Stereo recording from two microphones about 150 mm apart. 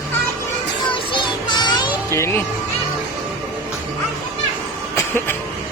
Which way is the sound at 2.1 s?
20° left (ahead or behind).